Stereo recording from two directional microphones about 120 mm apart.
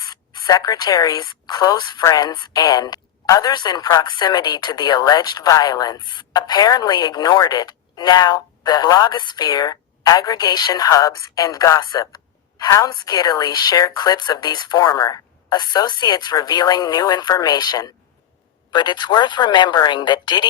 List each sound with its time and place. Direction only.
0.0 s speech: 35° left (ahead or behind)